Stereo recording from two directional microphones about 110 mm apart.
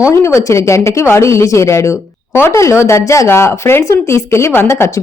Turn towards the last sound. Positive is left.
turn(degrees=25)  # may be behind; listen again after turning